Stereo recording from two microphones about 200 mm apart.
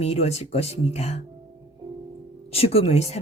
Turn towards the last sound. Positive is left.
turn(degrees=30)  # may be behind; listen again after turning